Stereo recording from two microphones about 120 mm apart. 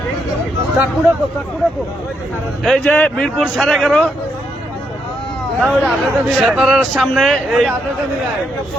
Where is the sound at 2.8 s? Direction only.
15° left (ahead or behind).